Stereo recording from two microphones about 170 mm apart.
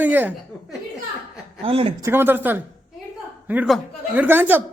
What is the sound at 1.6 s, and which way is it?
Speech, 35° right (ahead or behind).